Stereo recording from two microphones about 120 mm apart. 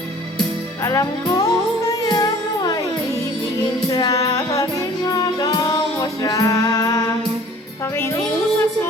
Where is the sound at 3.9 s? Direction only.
35° left (ahead or behind).